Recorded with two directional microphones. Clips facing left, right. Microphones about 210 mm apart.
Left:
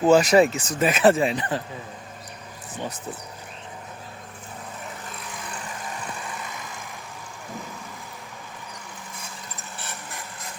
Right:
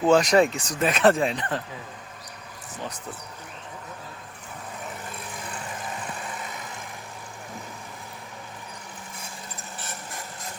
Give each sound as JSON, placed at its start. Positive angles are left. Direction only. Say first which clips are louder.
{"t": 0.0, "sound": "speech", "louder": "left 2 dB", "side_deg": 5}